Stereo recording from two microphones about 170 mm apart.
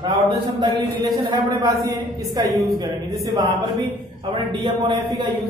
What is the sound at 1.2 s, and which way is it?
A woman's voice, 20° right (ahead or behind).